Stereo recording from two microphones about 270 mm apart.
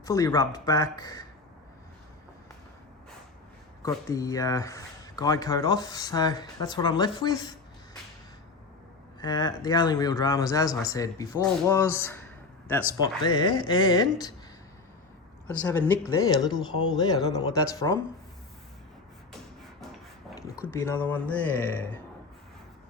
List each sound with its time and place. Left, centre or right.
0.0 s speech: centre
3.8 s speech: centre
9.2 s speech: centre
15.4 s speech: centre
20.7 s speech: centre